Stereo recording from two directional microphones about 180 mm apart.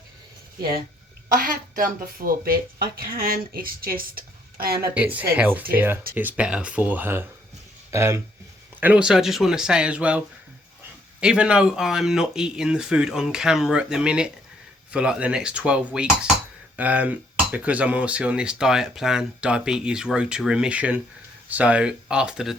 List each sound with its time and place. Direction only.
1.3 s speech: 50° right (ahead or behind)
4.9 s speech: 10° right (ahead or behind)